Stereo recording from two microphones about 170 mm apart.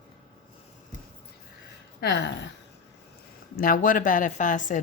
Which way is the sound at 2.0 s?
90° left.